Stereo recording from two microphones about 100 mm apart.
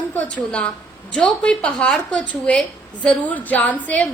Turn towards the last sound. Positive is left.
turn(degrees=15)  # may be behind; listen again after turning